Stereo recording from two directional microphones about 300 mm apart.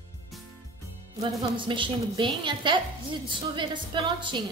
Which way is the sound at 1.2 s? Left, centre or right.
Centre.